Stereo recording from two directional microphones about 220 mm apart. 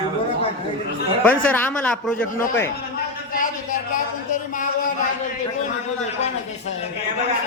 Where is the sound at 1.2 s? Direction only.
5° left (ahead or behind).